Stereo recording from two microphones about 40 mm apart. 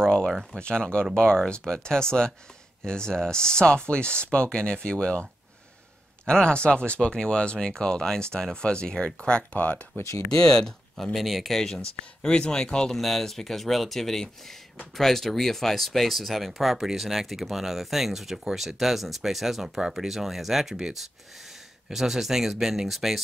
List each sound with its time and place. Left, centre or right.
0.0 s a sound: centre
0.3 s speech: centre
0.6 s speech: left
11.1 s speech: centre
11.6 s speech: centre
12.9 s speech: centre